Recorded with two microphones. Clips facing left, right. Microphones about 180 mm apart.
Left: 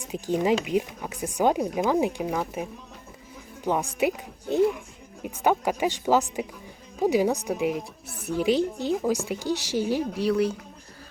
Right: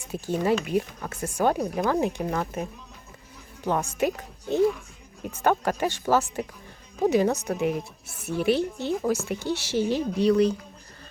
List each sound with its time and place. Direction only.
0.0 s a woman's voice: 15° left (ahead or behind)